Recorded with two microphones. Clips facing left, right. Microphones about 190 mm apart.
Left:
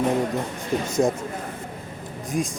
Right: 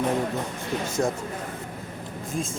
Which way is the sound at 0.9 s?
20° left (ahead or behind).